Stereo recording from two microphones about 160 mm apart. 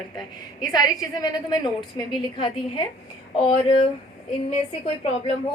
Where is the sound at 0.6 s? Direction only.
25° left (ahead or behind); by 5.3 s 40° left (ahead or behind).